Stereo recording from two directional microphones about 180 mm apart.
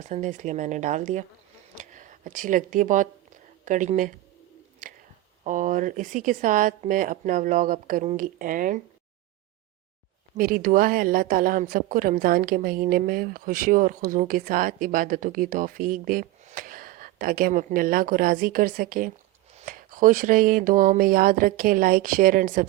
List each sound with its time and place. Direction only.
0.0 s a woman's voice: 45° right (ahead or behind)
4.8 s whispering: 45° right (ahead or behind)
5.4 s a woman's voice: 45° right (ahead or behind)
10.3 s a woman's voice: 50° right (ahead or behind)